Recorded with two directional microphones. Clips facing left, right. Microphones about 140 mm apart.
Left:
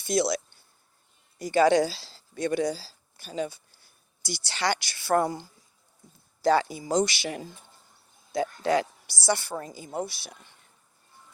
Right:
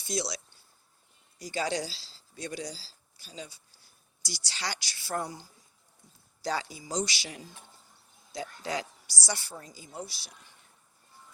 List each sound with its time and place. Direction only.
0.0 s a woman's voice: 55° left (ahead or behind)